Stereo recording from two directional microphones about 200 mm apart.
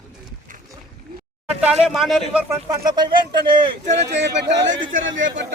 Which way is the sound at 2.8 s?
20° right (ahead or behind).